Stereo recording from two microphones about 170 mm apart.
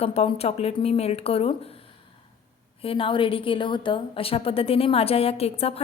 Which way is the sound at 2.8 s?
30° left (ahead or behind).